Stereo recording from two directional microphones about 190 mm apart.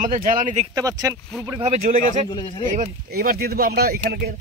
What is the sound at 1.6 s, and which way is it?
Speech, 35° right (ahead or behind).